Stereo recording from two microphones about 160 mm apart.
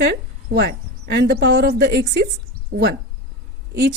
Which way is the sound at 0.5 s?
90° right.